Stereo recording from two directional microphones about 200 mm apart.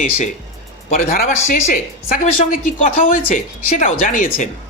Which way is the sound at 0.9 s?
45° left (ahead or behind).